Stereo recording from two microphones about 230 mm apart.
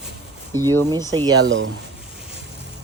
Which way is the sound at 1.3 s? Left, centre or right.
Right.